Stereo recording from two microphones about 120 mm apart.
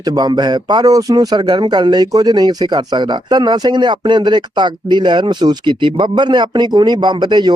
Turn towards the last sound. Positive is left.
turn(degrees=-40)  # may be behind; listen again after turning